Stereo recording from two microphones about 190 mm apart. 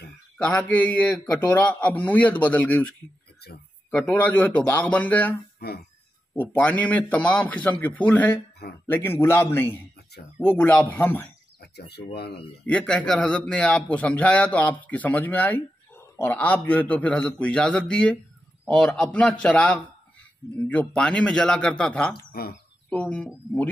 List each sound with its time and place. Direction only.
0.4 s a man's voice: 5° left (ahead or behind)
3.9 s a man's voice: 10° left (ahead or behind)
12.1 s speech: 60° left (ahead or behind)
12.6 s a man's voice: 5° left (ahead or behind)
22.1 s speech: 55° left (ahead or behind)
22.8 s a man's voice: 5° left (ahead or behind)